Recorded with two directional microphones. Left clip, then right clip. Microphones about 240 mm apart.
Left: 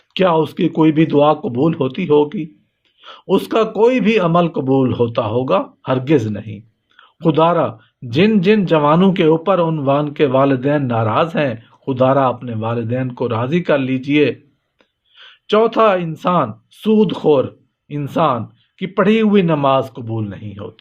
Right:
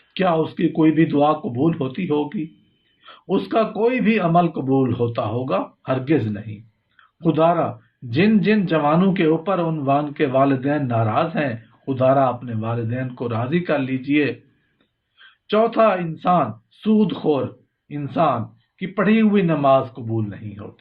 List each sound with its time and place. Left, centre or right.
0.1 s a man's voice: left
15.4 s a man's voice: left